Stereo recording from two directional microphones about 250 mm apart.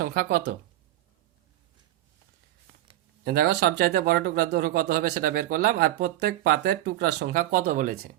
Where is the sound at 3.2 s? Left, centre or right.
Right.